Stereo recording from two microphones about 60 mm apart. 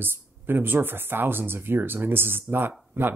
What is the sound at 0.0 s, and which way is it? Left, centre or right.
Speech, right.